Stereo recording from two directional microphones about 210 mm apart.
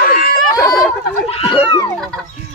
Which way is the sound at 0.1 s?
45° left (ahead or behind).